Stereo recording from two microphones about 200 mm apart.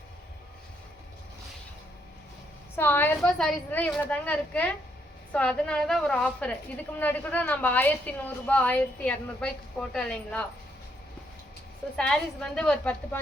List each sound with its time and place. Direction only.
2.7 s a woman's voice: 10° left (ahead or behind)
11.9 s a woman's voice: 5° left (ahead or behind)